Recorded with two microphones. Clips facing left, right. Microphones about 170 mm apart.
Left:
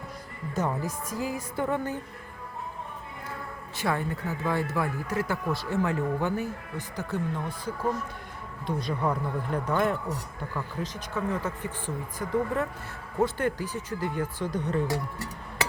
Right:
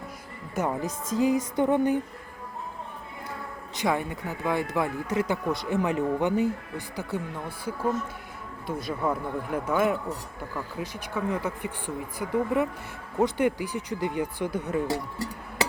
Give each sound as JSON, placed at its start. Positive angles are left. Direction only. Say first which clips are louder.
{"t": 0.5, "sound": "a woman's voice", "louder": "right 1 dB", "side_deg": -15}
{"t": 3.8, "sound": "speech", "louder": "right 2 dB", "side_deg": -15}